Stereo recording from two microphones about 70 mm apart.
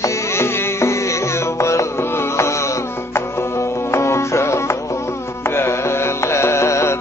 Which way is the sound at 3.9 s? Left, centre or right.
Left.